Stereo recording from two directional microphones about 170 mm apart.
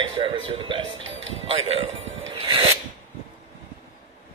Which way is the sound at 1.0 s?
90° right.